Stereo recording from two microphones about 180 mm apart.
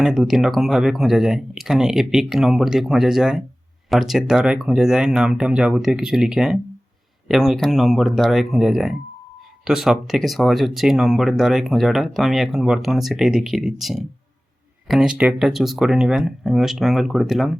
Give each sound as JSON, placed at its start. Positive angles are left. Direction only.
{"t": 0.0, "sound": "speech", "side_deg": 0}